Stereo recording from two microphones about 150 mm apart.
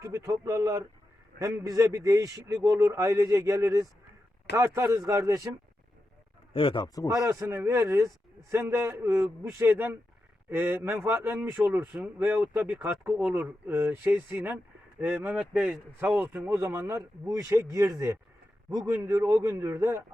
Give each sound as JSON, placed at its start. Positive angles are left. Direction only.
{"t": 0.0, "sound": "speech", "side_deg": -20}
{"t": 6.5, "sound": "speech", "side_deg": 35}
{"t": 7.2, "sound": "speech", "side_deg": -20}